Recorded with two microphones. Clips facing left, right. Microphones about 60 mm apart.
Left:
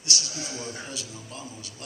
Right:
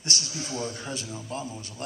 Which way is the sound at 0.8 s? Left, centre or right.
Right.